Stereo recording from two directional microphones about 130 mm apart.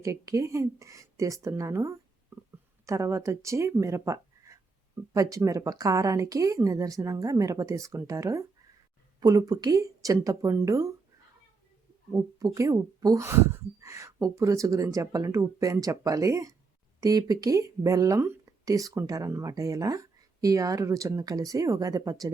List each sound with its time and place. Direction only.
0.0 s speech: 25° right (ahead or behind)
12.5 s speech: 25° right (ahead or behind)